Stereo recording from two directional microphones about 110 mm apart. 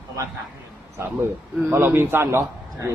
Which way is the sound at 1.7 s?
20° right (ahead or behind).